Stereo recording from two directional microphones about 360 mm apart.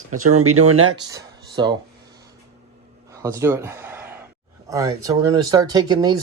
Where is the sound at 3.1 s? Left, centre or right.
Centre.